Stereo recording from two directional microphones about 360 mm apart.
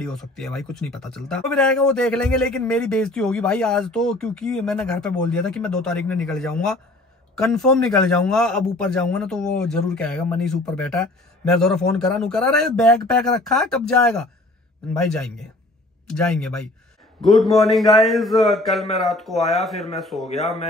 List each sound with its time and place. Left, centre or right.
0.0 s a man's voice: centre
20.3 s speech: centre